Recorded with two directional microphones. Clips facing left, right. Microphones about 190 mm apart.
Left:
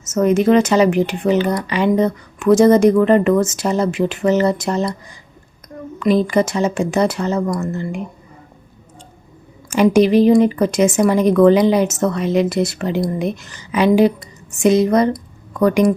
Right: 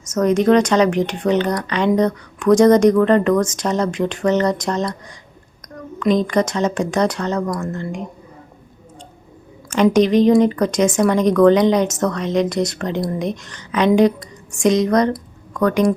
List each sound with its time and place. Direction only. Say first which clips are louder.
0.0 s speech: left 1 dB; 5° left (ahead or behind)
9.6 s speech: left 2 dB; 10° left (ahead or behind)